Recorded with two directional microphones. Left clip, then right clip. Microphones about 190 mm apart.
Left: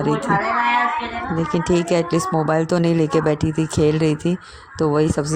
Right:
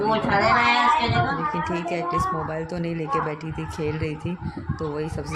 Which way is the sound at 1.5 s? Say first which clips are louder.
Left 7 dB; 45° left (ahead or behind).